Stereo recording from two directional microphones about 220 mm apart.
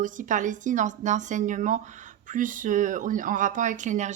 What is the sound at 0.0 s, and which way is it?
Speech, 35° right (ahead or behind).